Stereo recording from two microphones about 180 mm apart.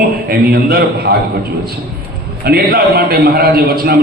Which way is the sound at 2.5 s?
60° right (ahead or behind).